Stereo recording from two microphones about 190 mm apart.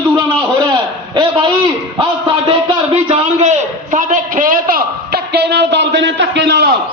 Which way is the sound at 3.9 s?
45° right (ahead or behind).